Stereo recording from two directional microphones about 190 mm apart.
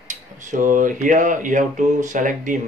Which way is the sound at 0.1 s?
40° right (ahead or behind).